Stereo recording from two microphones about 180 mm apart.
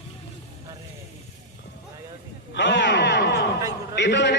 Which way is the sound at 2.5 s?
75° left (ahead or behind).